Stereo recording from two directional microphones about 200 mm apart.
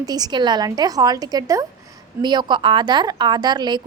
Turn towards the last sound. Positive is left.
turn(degrees=-20)  # may be behind; listen again after turning